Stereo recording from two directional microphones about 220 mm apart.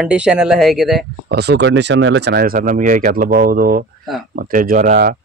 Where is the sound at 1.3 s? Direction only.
50° right (ahead or behind).